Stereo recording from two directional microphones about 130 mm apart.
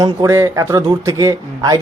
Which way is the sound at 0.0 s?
25° right (ahead or behind).